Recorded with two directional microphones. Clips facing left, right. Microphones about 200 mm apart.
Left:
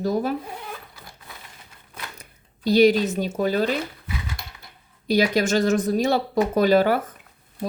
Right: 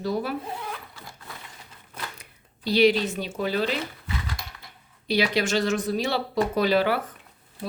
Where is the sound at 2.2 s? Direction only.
45° left (ahead or behind).